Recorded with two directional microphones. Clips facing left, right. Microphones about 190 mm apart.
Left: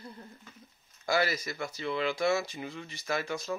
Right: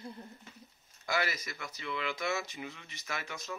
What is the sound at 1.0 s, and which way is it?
Speech, 35° left (ahead or behind).